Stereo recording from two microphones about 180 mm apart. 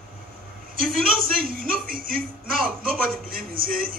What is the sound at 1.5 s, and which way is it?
Speech, 50° right (ahead or behind).